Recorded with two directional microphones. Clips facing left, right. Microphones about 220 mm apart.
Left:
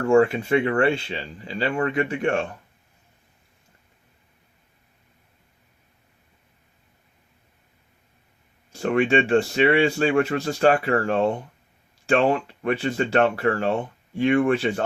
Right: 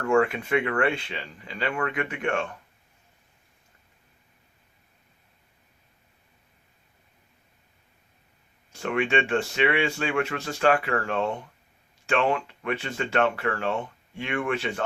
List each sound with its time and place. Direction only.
0.0 s speech: 30° left (ahead or behind)
8.7 s speech: 35° left (ahead or behind)